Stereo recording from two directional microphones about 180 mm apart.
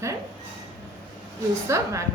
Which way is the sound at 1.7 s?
15° right (ahead or behind).